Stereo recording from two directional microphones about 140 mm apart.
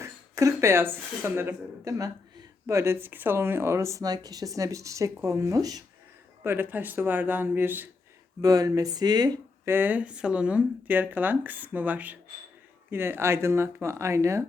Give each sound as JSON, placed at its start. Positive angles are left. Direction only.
{"t": 0.0, "sound": "speech", "side_deg": -20}
{"t": 6.4, "sound": "speech", "side_deg": -15}
{"t": 8.4, "sound": "speech", "side_deg": -25}
{"t": 9.6, "sound": "speech", "side_deg": -15}